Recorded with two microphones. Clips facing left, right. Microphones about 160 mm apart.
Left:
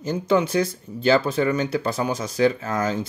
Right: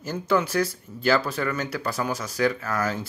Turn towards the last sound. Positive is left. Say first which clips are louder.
# left 3 dB
turn(degrees=20)  # may be behind; listen again after turning